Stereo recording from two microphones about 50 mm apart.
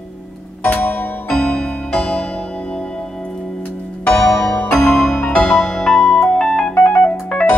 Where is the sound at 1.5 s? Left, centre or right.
Centre.